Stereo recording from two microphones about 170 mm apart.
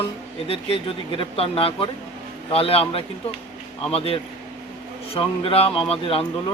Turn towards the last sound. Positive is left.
turn(degrees=30)  # may be behind; listen again after turning